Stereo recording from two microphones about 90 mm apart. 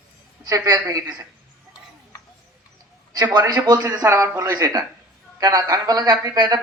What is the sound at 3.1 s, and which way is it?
Speech, 50° right (ahead or behind).